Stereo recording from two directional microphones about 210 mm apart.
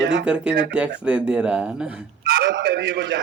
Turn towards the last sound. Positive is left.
turn(degrees=-55)  # may be behind; listen again after turning